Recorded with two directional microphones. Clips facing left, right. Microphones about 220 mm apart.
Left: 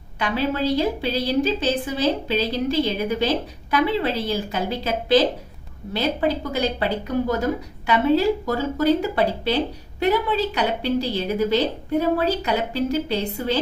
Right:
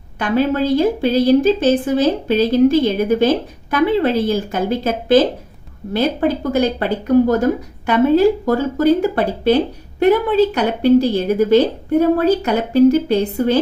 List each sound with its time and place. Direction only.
0.2 s a woman's voice: 50° right (ahead or behind)